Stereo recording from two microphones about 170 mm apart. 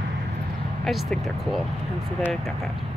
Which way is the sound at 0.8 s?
Centre (ahead or behind).